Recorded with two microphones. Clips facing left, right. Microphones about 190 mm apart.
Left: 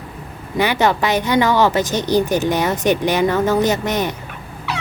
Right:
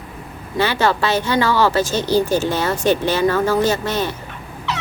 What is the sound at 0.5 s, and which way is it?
Speech, 15° left (ahead or behind).